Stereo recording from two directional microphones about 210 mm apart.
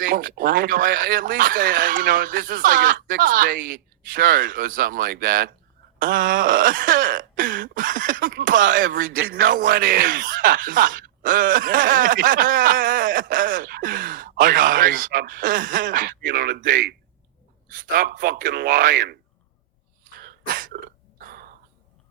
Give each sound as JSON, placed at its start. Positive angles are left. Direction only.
{"t": 0.0, "sound": "speech", "side_deg": -40}
{"t": 20.1, "sound": "sneeze", "side_deg": -40}
{"t": 21.2, "sound": "a sound", "side_deg": -45}